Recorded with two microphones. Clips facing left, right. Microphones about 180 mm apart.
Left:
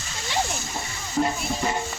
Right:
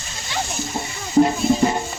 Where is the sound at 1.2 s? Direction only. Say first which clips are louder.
Right 9 dB; 35° right (ahead or behind).